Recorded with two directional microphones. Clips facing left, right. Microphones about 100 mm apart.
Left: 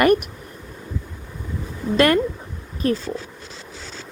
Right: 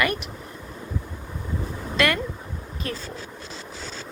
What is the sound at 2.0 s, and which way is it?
Speech, 35° left (ahead or behind).